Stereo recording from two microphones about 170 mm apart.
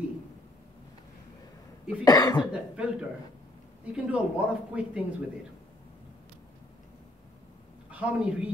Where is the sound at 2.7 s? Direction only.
5° right (ahead or behind).